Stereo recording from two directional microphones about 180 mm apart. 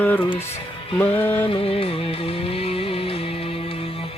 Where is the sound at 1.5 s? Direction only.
30° left (ahead or behind).